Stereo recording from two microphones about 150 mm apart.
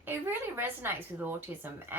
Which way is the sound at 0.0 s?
15° right (ahead or behind).